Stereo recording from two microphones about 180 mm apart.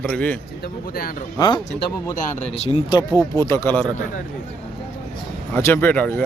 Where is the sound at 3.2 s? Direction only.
15° left (ahead or behind).